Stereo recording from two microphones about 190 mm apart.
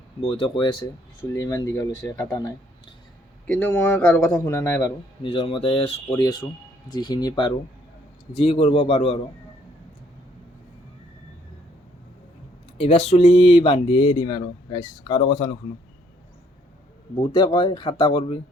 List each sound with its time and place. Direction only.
0.2 s a man's voice: 30° left (ahead or behind)
3.4 s a man's voice: 10° left (ahead or behind)
5.2 s speech: 30° left (ahead or behind)
6.1 s speech: 20° left (ahead or behind)
12.7 s speech: 30° left (ahead or behind)
17.3 s speech: 25° left (ahead or behind)